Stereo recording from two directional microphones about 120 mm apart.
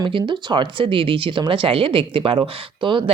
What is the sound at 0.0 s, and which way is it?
Speech, 45° right (ahead or behind).